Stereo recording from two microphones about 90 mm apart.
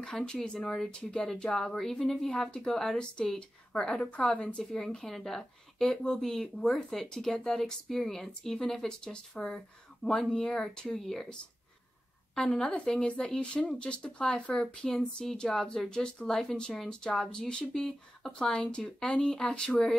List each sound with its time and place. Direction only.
0.0 s speech: 5° left (ahead or behind)
12.4 s speech: 5° left (ahead or behind)